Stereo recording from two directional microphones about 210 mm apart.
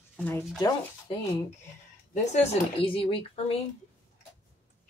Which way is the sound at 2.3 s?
25° left (ahead or behind).